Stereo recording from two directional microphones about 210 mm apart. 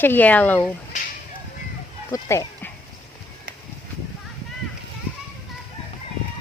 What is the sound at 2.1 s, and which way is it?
Speech, 15° left (ahead or behind).